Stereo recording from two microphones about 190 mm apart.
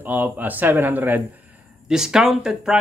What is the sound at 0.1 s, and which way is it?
A man's voice, 10° right (ahead or behind).